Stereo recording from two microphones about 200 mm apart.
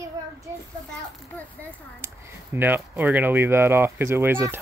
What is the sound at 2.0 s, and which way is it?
Speech, 10° right (ahead or behind).